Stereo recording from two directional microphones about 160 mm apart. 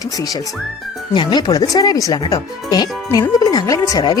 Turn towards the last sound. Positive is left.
turn(degrees=25)  # may be behind; listen again after turning